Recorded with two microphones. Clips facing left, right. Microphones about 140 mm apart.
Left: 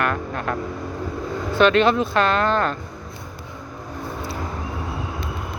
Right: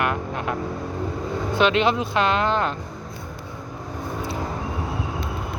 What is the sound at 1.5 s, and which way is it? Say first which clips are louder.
Speech: left 4 dB; 15° right (ahead or behind).